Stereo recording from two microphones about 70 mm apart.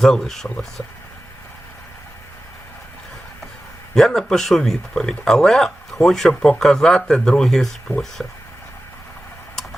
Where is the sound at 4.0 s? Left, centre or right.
Centre.